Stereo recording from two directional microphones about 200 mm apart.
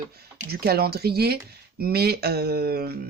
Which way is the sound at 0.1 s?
50° right (ahead or behind).